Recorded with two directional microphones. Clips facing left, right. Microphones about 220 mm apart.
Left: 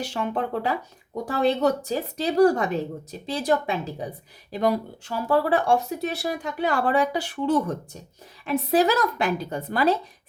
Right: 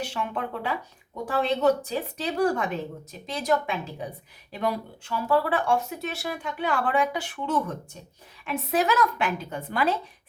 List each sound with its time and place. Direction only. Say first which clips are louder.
0.0 s speech: left 4 dB; 40° left (ahead or behind)